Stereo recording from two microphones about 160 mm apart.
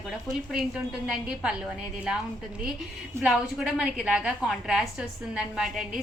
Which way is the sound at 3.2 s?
5° right (ahead or behind).